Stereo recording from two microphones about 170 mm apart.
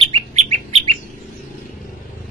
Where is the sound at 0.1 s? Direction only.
40° right (ahead or behind).